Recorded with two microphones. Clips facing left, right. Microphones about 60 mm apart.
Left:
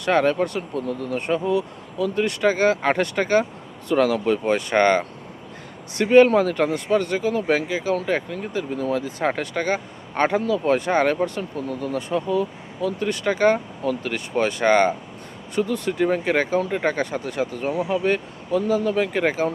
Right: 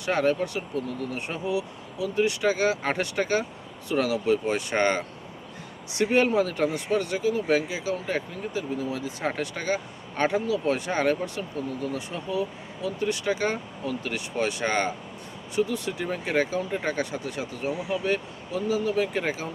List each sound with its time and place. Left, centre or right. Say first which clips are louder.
0.0 s speech: left 5 dB; left